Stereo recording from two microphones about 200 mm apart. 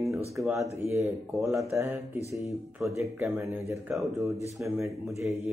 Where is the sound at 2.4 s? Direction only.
Centre (ahead or behind).